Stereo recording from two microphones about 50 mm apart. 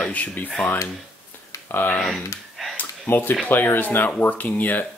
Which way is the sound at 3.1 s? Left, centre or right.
Left.